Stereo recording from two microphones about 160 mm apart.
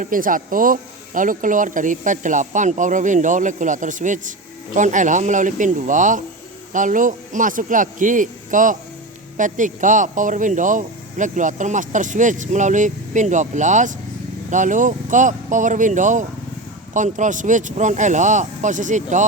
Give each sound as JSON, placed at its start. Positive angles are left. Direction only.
{"t": 0.0, "sound": "speech", "side_deg": -60}